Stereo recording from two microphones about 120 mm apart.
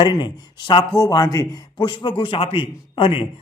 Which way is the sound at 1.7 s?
45° left (ahead or behind).